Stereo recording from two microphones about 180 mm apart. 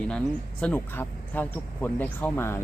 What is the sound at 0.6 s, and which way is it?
Speech, 10° left (ahead or behind).